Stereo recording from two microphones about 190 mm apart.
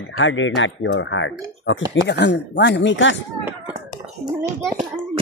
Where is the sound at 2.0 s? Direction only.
65° left (ahead or behind).